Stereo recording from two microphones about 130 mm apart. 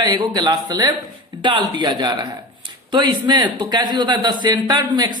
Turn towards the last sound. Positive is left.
turn(degrees=-35)  # may be behind; listen again after turning